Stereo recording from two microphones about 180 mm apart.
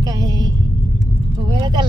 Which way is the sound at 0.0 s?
20° right (ahead or behind).